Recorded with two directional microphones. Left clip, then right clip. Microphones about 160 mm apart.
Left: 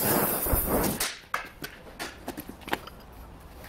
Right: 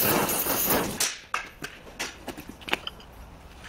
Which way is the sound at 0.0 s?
5° right (ahead or behind).